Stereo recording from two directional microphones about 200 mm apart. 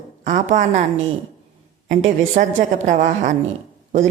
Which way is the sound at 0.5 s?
35° right (ahead or behind).